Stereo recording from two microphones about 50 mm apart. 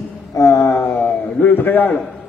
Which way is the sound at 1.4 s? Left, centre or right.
Left.